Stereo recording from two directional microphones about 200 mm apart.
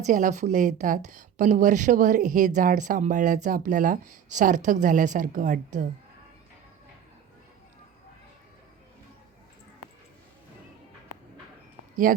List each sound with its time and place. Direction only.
0.0 s a woman's voice: 40° right (ahead or behind)
12.1 s speech: 45° right (ahead or behind)